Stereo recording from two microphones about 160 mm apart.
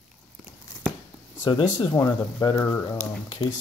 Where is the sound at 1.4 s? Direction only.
25° left (ahead or behind).